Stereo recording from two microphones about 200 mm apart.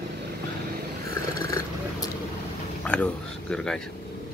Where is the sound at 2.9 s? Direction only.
5° left (ahead or behind).